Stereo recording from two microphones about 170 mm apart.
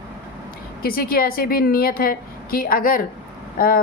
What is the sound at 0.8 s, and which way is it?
A woman's voice, 60° left (ahead or behind).